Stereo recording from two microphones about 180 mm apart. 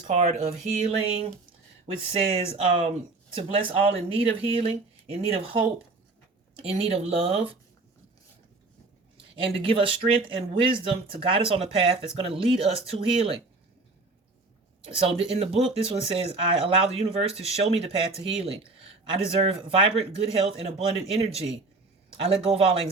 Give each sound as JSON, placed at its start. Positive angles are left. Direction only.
{"t": 0.1, "sound": "speech", "side_deg": -40}
{"t": 9.3, "sound": "speech", "side_deg": -30}
{"t": 14.8, "sound": "speech", "side_deg": -35}